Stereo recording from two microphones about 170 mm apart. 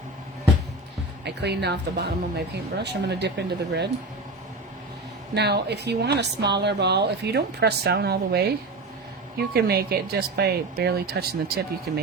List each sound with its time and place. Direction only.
1.2 s speech: 80° right
5.3 s speech: 75° right (ahead or behind)
9.5 s speech: 70° right (ahead or behind)